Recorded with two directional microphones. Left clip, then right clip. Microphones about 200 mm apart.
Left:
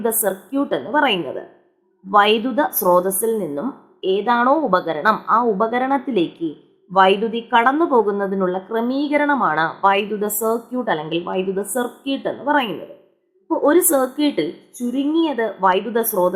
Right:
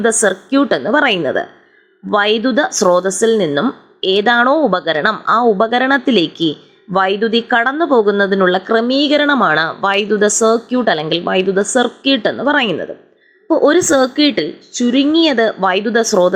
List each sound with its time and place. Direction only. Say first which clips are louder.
0.0 s a woman's voice: right 7 dB; 15° right (ahead or behind)